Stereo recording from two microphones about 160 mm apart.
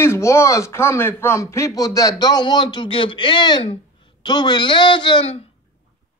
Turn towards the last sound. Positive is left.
turn(degrees=35)  # may be behind; listen again after turning